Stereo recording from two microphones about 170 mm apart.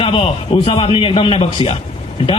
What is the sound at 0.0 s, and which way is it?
A man's voice, 30° left (ahead or behind).